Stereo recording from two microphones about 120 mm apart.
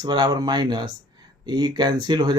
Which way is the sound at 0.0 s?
40° right (ahead or behind).